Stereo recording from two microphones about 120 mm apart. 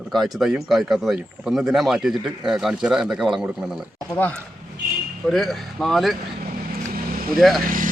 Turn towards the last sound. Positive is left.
turn(degrees=0)  # may be behind; listen again after turning